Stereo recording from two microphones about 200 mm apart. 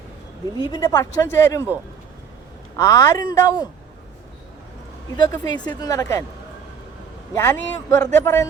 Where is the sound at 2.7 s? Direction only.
20° left (ahead or behind).